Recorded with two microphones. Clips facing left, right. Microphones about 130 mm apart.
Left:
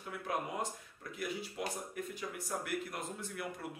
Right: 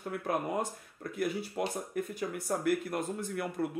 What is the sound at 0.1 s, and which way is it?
Speech, 50° right (ahead or behind).